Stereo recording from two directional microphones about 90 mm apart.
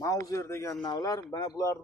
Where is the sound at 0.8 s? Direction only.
45° left (ahead or behind).